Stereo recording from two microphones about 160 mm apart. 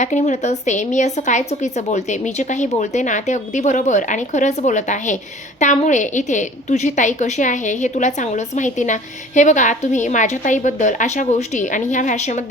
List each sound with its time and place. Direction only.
0.0 s a woman's voice: 50° left (ahead or behind)